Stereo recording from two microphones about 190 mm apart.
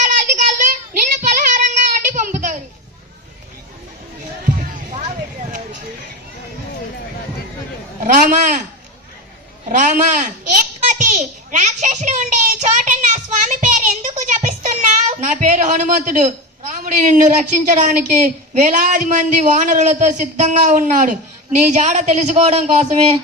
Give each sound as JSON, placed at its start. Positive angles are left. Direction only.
{"t": 0.1, "sound": "child singing", "side_deg": -40}
{"t": 8.0, "sound": "a man's voice", "side_deg": -40}
{"t": 9.7, "sound": "a man's voice", "side_deg": -40}
{"t": 10.9, "sound": "a sound", "side_deg": -40}
{"t": 15.1, "sound": "a woman's voice", "side_deg": -40}